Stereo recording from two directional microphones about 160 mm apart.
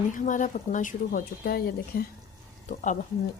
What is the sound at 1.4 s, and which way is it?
Speech, 70° left (ahead or behind).